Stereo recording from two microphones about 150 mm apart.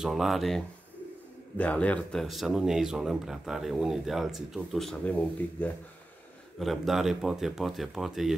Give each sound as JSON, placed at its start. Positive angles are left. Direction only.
{"t": 0.0, "sound": "speech", "side_deg": -5}